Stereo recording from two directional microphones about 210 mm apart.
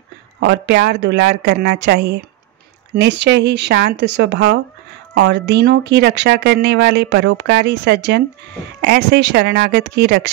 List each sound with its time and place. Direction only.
0.4 s speech: 55° right (ahead or behind)